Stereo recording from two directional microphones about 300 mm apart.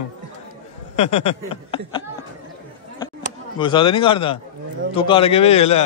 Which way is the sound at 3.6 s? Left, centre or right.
Centre.